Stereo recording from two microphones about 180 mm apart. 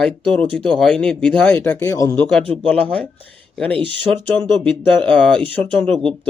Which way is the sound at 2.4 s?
30° right (ahead or behind).